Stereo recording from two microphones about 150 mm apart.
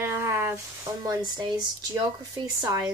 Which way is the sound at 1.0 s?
25° right (ahead or behind).